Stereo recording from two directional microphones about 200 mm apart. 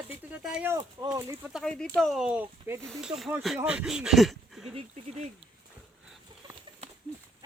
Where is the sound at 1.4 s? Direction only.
Centre (ahead or behind).